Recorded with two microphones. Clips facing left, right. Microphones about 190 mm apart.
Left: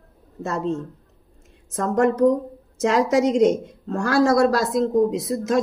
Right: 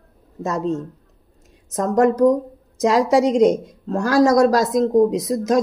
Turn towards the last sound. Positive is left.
turn(degrees=-40)  # may be behind; listen again after turning